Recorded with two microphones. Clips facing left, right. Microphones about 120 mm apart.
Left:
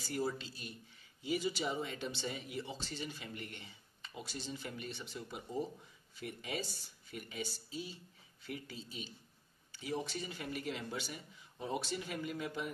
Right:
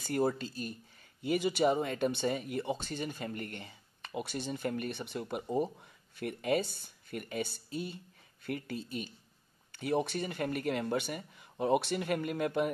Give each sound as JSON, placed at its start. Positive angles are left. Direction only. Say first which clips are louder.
{"t": 0.0, "sound": "speech", "louder": "right 7 dB", "side_deg": -55}
{"t": 1.2, "sound": "speech", "louder": "right 8 dB", "side_deg": -60}